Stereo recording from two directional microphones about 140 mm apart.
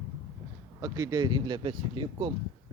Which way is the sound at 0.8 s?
25° right (ahead or behind).